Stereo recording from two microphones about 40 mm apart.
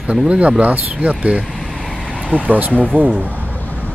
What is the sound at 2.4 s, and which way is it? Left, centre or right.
Speech, right.